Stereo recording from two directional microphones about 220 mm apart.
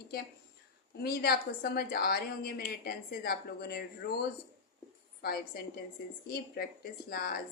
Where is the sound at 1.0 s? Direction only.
45° left (ahead or behind).